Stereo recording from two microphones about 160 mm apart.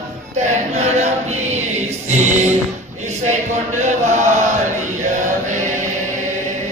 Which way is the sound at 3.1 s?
45° right (ahead or behind).